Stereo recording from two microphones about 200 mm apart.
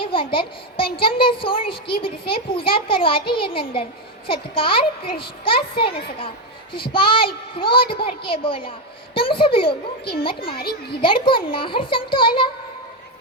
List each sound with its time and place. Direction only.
0.0 s a child's voice: 25° left (ahead or behind)
11.0 s a child's voice: 25° left (ahead or behind)